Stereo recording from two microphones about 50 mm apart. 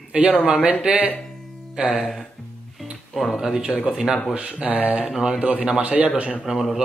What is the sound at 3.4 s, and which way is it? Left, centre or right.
Speech, centre.